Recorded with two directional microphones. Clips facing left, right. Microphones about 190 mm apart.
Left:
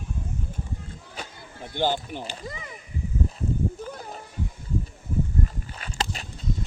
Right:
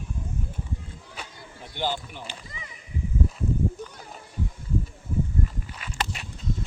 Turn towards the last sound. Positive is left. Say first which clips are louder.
# left 1 dB
turn(degrees=30)  # may be behind; listen again after turning